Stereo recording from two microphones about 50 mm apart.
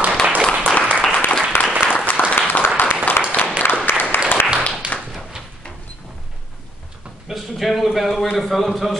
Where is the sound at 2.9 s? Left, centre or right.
Left.